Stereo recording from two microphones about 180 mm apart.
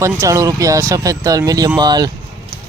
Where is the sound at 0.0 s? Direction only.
15° right (ahead or behind).